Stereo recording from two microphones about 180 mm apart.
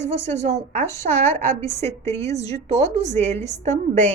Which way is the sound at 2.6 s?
35° right (ahead or behind).